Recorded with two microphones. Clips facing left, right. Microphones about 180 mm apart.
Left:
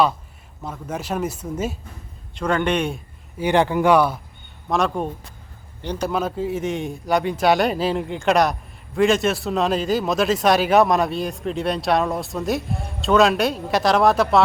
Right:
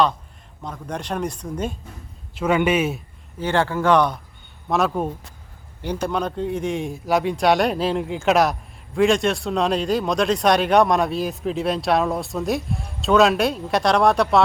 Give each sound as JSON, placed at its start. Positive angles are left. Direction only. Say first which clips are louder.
{"t": 0.6, "sound": "speech", "louder": "left 1 dB", "side_deg": 5}
{"t": 2.3, "sound": "speech", "louder": "right 2 dB", "side_deg": -5}
{"t": 3.3, "sound": "speech", "louder": "left 3 dB", "side_deg": 15}